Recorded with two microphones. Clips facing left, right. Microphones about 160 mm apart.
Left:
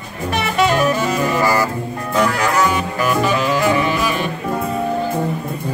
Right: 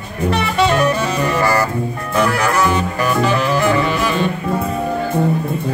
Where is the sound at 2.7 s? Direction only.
10° left (ahead or behind).